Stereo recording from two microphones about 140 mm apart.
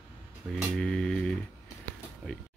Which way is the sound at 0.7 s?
5° left (ahead or behind).